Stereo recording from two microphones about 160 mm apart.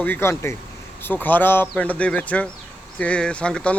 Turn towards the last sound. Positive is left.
turn(degrees=5)  # may be behind; listen again after turning